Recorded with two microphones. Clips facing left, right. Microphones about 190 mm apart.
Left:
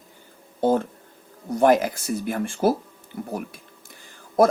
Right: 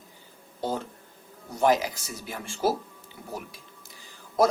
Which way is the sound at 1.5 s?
55° left (ahead or behind).